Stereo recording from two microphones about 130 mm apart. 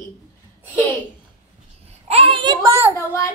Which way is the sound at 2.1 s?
45° right (ahead or behind).